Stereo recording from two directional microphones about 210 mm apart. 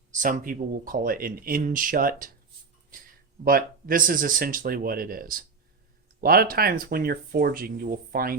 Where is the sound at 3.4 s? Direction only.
40° right (ahead or behind).